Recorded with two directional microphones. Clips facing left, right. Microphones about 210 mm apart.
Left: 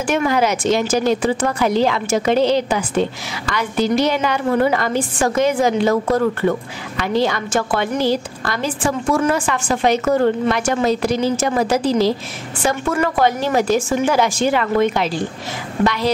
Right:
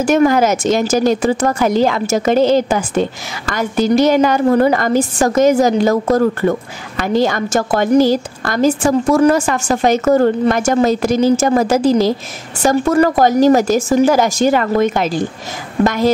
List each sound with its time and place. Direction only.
0.0 s a woman's voice: 40° right (ahead or behind)